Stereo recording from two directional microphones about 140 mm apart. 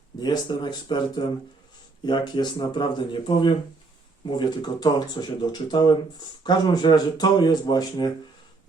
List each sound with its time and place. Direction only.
0.2 s speech: 30° left (ahead or behind)